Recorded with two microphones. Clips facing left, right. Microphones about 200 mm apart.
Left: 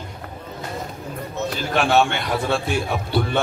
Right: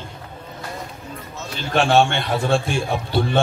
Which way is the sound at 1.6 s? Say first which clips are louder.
Right 2 dB; 30° right (ahead or behind).